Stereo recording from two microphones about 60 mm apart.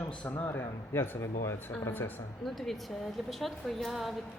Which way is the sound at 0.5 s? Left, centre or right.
Left.